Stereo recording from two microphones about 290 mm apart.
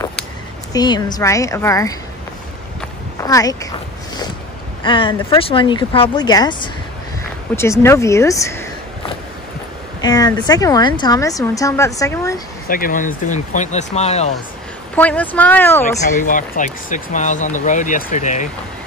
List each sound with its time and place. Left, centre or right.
0.7 s a woman's voice: centre
3.2 s speech: centre
4.8 s a woman's voice: centre
10.0 s a woman's voice: centre
12.6 s speech: left
15.0 s speech: centre
16.1 s speech: left